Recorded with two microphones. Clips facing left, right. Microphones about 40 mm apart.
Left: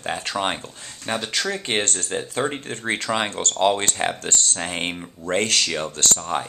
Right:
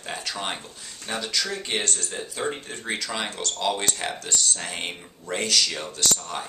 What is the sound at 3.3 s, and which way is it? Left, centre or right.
Speech, left.